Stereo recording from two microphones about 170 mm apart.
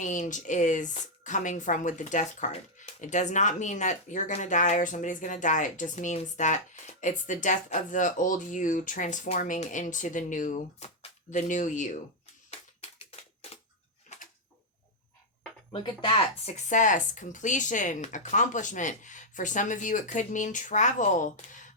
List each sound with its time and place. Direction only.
0.0 s speech: 45° left (ahead or behind)
15.7 s speech: 30° left (ahead or behind); by 21.6 s 45° left (ahead or behind)